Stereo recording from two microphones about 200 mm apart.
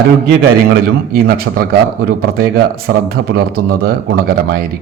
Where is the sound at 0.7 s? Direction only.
50° right (ahead or behind).